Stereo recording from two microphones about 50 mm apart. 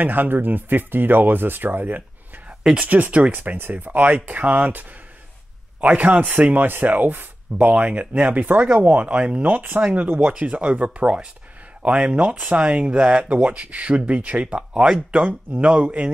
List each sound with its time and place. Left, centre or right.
0.0 s speech: right
9.5 s speech: right
10.2 s speech: right